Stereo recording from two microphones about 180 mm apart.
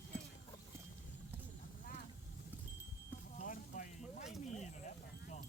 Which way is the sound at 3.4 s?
50° left (ahead or behind).